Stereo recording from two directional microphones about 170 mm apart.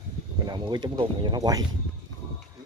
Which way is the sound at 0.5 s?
25° right (ahead or behind).